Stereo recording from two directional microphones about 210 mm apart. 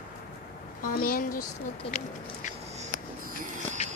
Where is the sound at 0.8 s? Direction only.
40° left (ahead or behind).